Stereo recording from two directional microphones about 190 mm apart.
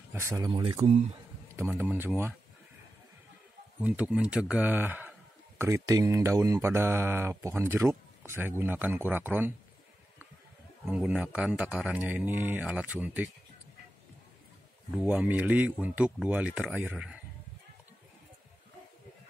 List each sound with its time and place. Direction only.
0.1 s speech: 15° right (ahead or behind)
1.7 s speech: 10° right (ahead or behind)
3.8 s speech: 5° right (ahead or behind)
10.9 s speech: 5° right (ahead or behind)
15.0 s speech: 5° right (ahead or behind)